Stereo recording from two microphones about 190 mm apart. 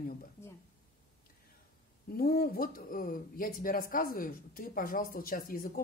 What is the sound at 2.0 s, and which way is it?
A woman's voice, 50° left (ahead or behind).